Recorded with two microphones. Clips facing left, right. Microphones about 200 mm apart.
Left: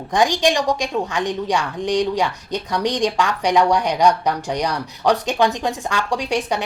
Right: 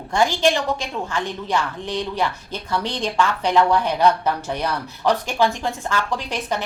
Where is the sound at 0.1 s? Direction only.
15° left (ahead or behind).